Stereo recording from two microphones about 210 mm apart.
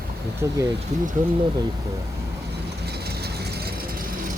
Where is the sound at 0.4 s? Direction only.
15° right (ahead or behind).